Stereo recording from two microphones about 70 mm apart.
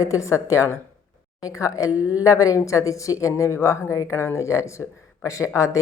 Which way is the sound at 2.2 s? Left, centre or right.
Left.